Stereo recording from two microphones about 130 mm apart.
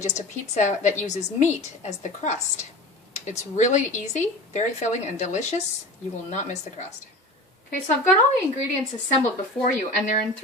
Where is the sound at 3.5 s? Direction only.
65° left (ahead or behind).